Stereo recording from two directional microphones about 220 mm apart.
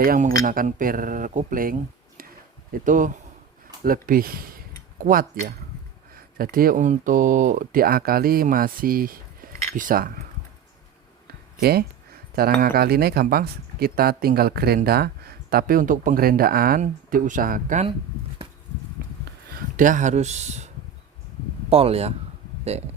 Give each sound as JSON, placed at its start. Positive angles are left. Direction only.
{"t": 0.0, "sound": "speech", "side_deg": -40}
{"t": 2.7, "sound": "speech", "side_deg": -35}
{"t": 11.6, "sound": "speech", "side_deg": -45}
{"t": 19.0, "sound": "a sound", "side_deg": -45}
{"t": 19.7, "sound": "speech", "side_deg": -35}
{"t": 21.7, "sound": "speech", "side_deg": -25}